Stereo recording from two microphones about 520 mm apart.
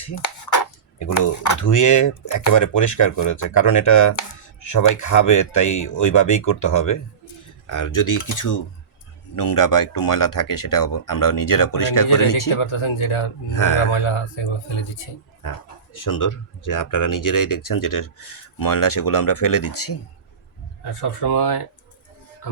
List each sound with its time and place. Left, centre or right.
0.2 s chopping: left
1.0 s speech: left
12.5 s speech: left
13.5 s speech: left
13.9 s speech: left
15.4 s speech: left
21.0 s speech: left